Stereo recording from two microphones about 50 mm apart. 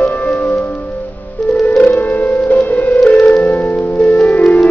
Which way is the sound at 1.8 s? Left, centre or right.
Left.